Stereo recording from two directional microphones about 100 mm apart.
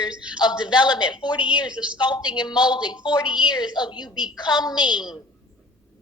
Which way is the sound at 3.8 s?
45° left (ahead or behind).